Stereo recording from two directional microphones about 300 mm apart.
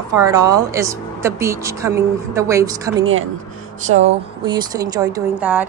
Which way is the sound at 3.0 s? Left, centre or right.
Right.